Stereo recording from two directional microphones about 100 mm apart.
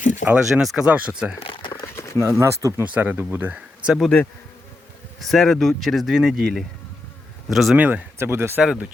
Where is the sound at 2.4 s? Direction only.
30° right (ahead or behind).